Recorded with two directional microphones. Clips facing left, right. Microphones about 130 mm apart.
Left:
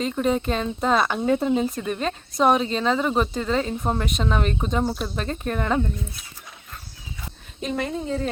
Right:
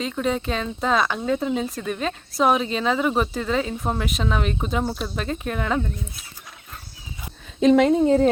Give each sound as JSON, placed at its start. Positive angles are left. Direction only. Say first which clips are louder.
{"t": 0.2, "sound": "speech", "louder": "left 1 dB", "side_deg": 0}
{"t": 7.6, "sound": "speech", "louder": "right 12 dB", "side_deg": -90}